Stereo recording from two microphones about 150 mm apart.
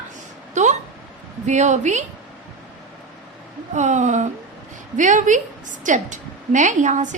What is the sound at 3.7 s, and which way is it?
A woman's voice, 50° right (ahead or behind).